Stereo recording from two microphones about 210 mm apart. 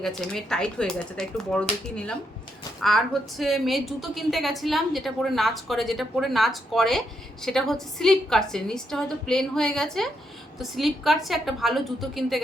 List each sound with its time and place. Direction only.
0.0 s a woman's voice: centre (ahead or behind)